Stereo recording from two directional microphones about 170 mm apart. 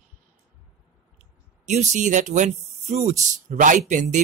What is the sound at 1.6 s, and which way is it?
Speech, 45° right (ahead or behind).